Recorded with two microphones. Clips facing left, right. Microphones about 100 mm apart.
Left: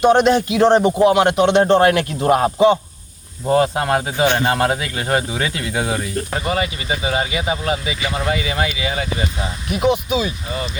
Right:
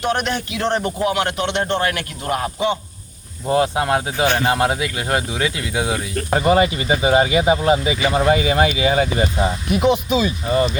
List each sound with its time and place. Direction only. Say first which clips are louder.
0.0 s a man's voice: left 8 dB; 20° left (ahead or behind)
1.5 s a man's voice: left 8 dB; 35° left (ahead or behind)
3.5 s speech: left 1 dB; 15° right (ahead or behind)
6.3 s speech: right 8 dB; 25° right (ahead or behind)
9.8 s a man's voice: even; 10° left (ahead or behind)